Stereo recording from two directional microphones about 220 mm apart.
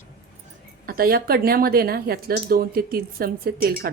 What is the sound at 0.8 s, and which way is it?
Speech, 40° right (ahead or behind).